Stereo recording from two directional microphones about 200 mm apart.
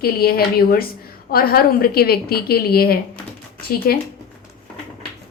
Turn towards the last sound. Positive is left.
turn(degrees=50)  # may be behind; listen again after turning